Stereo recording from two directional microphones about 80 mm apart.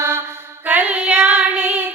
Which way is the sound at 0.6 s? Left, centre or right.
Centre.